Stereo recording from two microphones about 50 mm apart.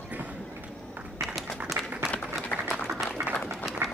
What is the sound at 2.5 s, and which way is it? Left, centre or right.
Applause, left.